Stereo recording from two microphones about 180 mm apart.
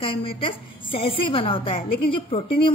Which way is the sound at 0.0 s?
30° left (ahead or behind).